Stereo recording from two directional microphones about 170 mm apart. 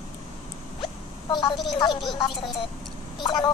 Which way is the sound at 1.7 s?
25° left (ahead or behind).